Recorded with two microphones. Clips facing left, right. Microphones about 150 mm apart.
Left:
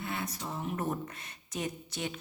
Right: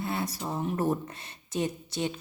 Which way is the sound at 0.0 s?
35° right (ahead or behind).